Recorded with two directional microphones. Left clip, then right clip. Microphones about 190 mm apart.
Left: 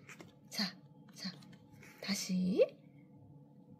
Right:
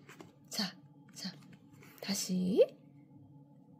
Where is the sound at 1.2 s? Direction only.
40° right (ahead or behind).